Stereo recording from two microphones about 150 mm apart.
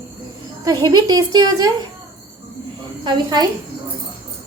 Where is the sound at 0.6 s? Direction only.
25° right (ahead or behind).